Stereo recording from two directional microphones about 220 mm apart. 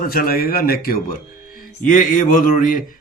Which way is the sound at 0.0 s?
40° left (ahead or behind).